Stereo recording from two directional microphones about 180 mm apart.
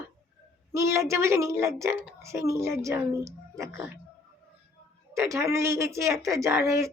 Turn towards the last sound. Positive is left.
turn(degrees=-15)  # may be behind; listen again after turning